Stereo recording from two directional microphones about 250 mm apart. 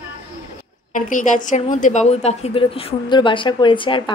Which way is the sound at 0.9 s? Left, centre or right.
Left.